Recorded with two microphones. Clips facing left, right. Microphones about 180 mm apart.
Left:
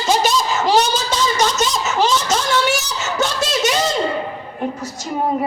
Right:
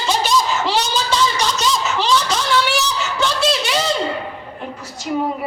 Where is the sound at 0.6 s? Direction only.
45° left (ahead or behind).